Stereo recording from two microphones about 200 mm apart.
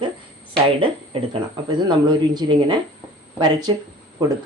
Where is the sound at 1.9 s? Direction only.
20° right (ahead or behind).